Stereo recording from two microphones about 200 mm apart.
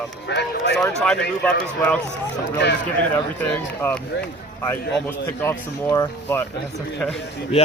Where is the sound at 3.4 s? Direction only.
10° left (ahead or behind).